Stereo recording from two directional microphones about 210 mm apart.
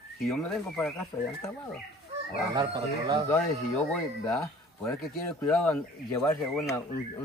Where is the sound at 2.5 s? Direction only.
20° right (ahead or behind).